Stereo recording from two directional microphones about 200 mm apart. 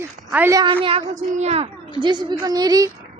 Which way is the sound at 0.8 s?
30° right (ahead or behind).